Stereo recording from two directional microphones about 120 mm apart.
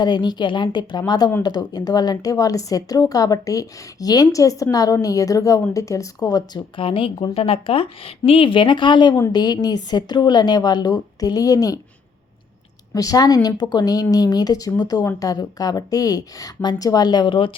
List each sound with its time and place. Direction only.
0.0 s a woman's voice: 35° left (ahead or behind)
6.8 s speech: 45° left (ahead or behind); by 11.8 s 30° left (ahead or behind)
12.9 s speech: 30° left (ahead or behind)